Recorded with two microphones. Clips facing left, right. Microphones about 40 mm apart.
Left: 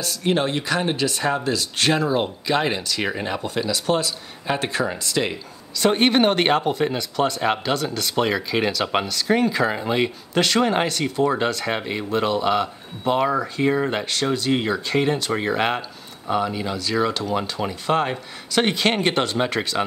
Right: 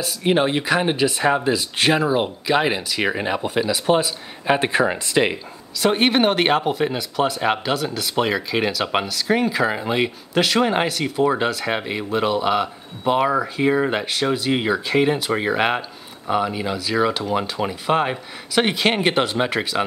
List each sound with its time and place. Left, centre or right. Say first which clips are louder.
0.0 s speech: right 3 dB; centre
5.8 s speech: even; centre